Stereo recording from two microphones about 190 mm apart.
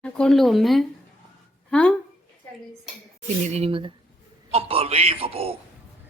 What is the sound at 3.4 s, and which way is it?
A man's voice, 35° right (ahead or behind).